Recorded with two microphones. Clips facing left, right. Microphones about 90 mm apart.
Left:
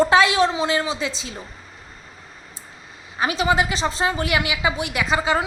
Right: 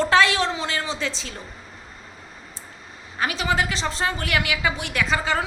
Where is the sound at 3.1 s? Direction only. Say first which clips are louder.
Left 4 dB; 20° left (ahead or behind).